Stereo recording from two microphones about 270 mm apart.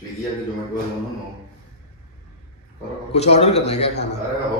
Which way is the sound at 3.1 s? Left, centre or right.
Left.